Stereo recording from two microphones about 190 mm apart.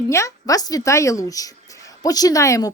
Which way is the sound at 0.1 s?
15° left (ahead or behind).